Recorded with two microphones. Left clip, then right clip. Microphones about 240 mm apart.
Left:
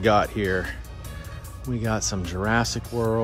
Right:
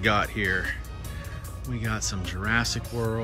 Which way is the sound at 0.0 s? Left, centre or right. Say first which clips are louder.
Left 4 dB; centre.